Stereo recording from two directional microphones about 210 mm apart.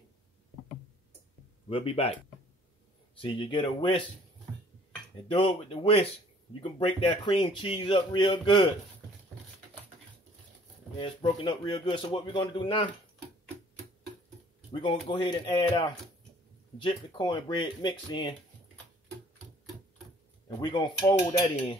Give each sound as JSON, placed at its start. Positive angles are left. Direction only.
{"t": 1.7, "sound": "a man's voice", "side_deg": 25}
{"t": 3.2, "sound": "a man's voice", "side_deg": 25}
{"t": 5.3, "sound": "a man's voice", "side_deg": 25}
{"t": 11.0, "sound": "a man's voice", "side_deg": 25}
{"t": 14.7, "sound": "a man's voice", "side_deg": 20}
{"t": 20.4, "sound": "a man's voice", "side_deg": 20}